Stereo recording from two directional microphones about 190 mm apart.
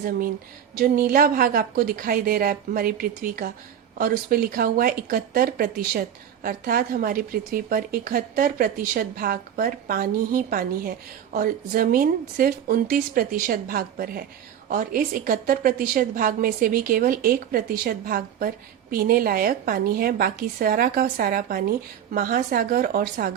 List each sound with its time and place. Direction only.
0.8 s speech: 50° right (ahead or behind)